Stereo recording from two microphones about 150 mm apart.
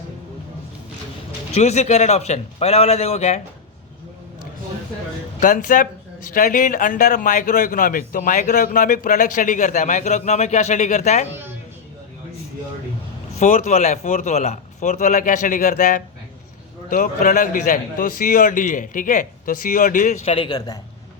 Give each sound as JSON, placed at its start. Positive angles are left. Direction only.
{"t": 1.5, "sound": "speech", "side_deg": 50}
{"t": 5.4, "sound": "speech", "side_deg": 65}
{"t": 13.3, "sound": "speech", "side_deg": 50}
{"t": 20.2, "sound": "a man's voice", "side_deg": 35}